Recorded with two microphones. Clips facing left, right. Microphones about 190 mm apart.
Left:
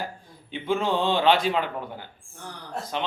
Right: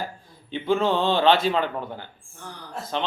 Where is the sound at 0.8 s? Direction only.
15° left (ahead or behind).